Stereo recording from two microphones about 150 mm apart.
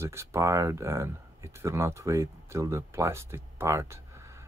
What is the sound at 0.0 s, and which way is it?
Speech, 15° right (ahead or behind).